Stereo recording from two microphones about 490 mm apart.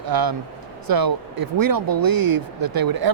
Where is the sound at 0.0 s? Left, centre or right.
Right.